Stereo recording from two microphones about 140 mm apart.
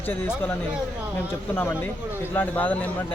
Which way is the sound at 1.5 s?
15° left (ahead or behind).